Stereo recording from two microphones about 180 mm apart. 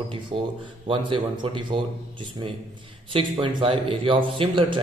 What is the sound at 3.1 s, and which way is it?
A man's voice, 30° right (ahead or behind).